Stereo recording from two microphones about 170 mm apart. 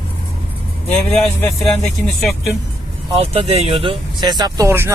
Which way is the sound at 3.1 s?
35° right (ahead or behind).